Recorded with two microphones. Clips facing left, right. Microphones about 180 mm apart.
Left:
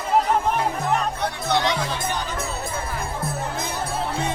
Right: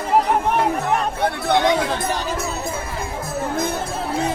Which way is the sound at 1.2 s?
55° right (ahead or behind).